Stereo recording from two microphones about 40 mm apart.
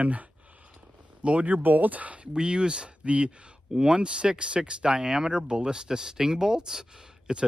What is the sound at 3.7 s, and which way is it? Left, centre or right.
Speech, centre.